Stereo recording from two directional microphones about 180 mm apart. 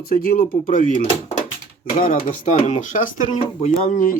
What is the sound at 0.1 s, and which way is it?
Speech, 55° left (ahead or behind).